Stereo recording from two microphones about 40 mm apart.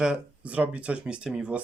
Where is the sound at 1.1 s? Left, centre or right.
Right.